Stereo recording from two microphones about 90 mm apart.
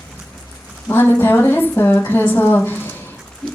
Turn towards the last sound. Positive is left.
turn(degrees=10)  # may be behind; listen again after turning